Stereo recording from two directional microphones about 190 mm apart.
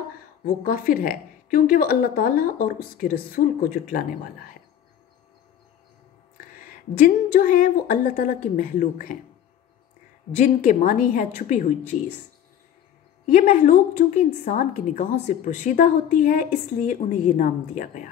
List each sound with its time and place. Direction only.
0.7 s a woman's voice: 50° left (ahead or behind)
7.0 s a woman's voice: 45° left (ahead or behind)
10.4 s a woman's voice: 45° left (ahead or behind)
13.3 s a woman's voice: 40° left (ahead or behind)
17.0 s a woman's voice: 30° left (ahead or behind)
17.4 s a woman's voice: 45° left (ahead or behind)